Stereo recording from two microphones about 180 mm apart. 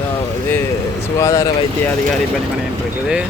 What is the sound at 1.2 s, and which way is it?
Speech, 20° left (ahead or behind).